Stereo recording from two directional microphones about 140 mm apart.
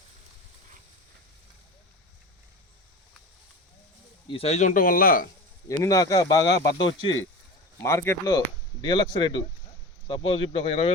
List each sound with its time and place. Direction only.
4.3 s speech: 45° left (ahead or behind); by 5.3 s 90° left
5.6 s speech: 25° left (ahead or behind)
7.8 s speech: 20° left (ahead or behind)
8.8 s speech: 35° left (ahead or behind)